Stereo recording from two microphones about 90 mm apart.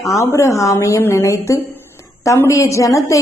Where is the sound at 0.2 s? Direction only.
35° left (ahead or behind).